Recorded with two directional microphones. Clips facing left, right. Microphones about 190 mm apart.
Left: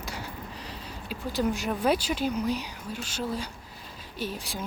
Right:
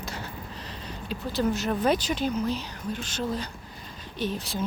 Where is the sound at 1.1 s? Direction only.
10° left (ahead or behind).